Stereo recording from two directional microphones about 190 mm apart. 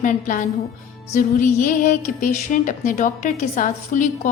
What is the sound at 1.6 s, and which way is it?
A woman's voice, 40° left (ahead or behind).